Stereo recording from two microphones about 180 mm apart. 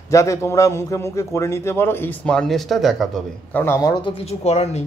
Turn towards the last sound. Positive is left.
turn(degrees=35)  # may be behind; listen again after turning